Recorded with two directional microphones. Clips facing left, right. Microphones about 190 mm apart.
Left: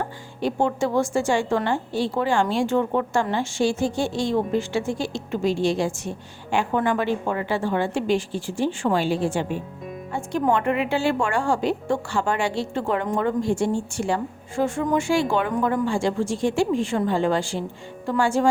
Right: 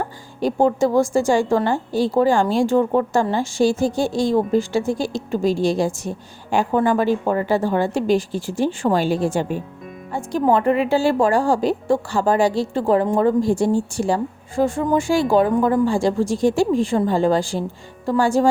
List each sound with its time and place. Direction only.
0.3 s a woman's voice: 40° right (ahead or behind)